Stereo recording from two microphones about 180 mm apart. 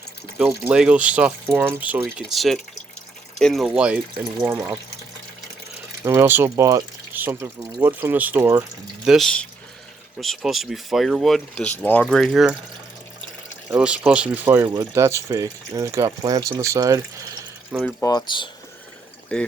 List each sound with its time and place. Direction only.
0.6 s speech: 5° right (ahead or behind)
2.1 s speech: centre (ahead or behind)
6.1 s speech: 10° right (ahead or behind)
9.0 s speech: centre (ahead or behind)
13.7 s speech: 5° right (ahead or behind)
18.0 s speech: 25° left (ahead or behind)
19.3 s speech: 5° left (ahead or behind)